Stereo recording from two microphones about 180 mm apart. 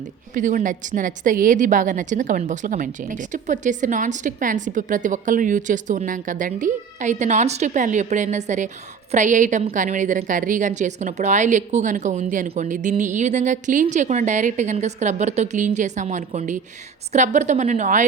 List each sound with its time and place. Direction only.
0.3 s a woman's voice: 45° right (ahead or behind)